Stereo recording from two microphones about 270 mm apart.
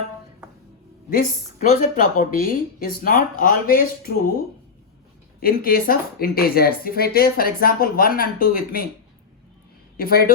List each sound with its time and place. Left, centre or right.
1.1 s speech: left
5.4 s speech: left
10.0 s speech: left